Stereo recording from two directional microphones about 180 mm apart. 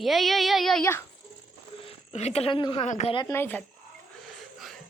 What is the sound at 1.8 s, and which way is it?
A woman's voice, 35° left (ahead or behind).